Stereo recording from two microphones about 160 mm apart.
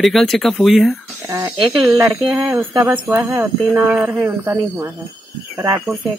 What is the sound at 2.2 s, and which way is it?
Speech, 20° right (ahead or behind).